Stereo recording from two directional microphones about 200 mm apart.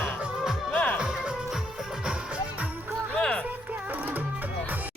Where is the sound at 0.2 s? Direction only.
Centre (ahead or behind).